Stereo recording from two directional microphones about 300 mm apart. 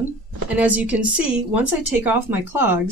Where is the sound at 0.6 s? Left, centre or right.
Centre.